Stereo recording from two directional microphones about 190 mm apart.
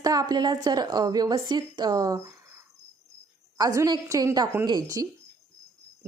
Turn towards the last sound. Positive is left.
turn(degrees=-20)  # may be behind; listen again after turning